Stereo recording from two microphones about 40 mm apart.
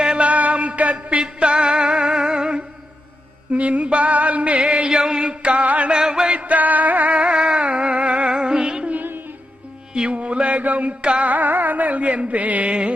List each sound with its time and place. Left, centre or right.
0.0 s a sound: right
1.4 s music: right
3.5 s music: right
4.9 s a sound: centre
5.3 s music: right
5.9 s music: centre
6.3 s music: right
7.1 s music: right
10.1 s mantra: right
10.6 s music: right
11.3 s music: right